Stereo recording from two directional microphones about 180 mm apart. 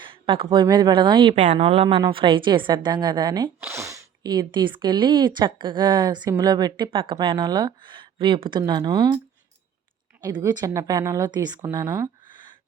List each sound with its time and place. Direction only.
0.0 s speech: 30° right (ahead or behind)
10.2 s speech: 20° right (ahead or behind)